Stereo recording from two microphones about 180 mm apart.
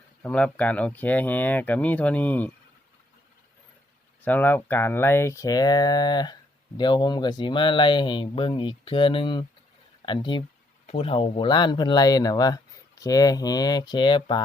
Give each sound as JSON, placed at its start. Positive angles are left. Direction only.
{"t": 0.2, "sound": "speech", "side_deg": 5}
{"t": 4.2, "sound": "speech", "side_deg": 10}